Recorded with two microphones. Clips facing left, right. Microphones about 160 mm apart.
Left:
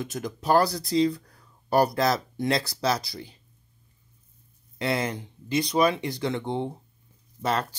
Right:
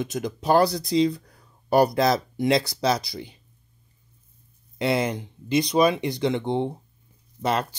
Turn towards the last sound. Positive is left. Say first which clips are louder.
# right 2 dB
turn(degrees=-20)  # may be behind; listen again after turning